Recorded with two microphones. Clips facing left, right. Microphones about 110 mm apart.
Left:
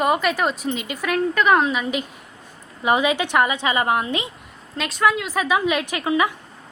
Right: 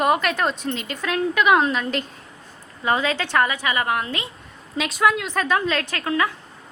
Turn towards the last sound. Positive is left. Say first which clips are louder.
# left 2 dB
turn(degrees=15)  # may be behind; listen again after turning